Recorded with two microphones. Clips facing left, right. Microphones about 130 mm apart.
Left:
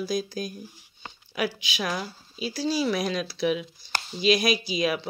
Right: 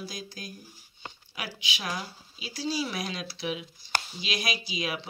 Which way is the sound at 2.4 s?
40° left (ahead or behind).